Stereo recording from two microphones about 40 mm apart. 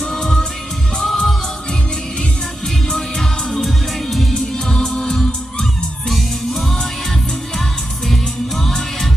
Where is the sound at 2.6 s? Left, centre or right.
Centre.